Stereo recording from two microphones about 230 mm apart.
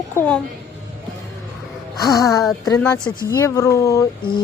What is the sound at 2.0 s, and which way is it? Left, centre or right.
A woman's voice, centre.